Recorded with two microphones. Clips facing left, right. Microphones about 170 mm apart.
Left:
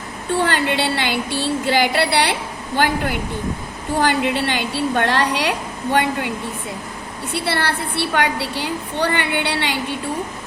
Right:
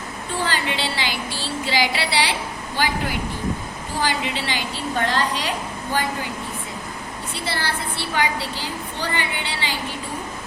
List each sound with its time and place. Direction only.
0.3 s a woman's voice: 60° left (ahead or behind)
7.3 s a woman's voice: 65° left (ahead or behind)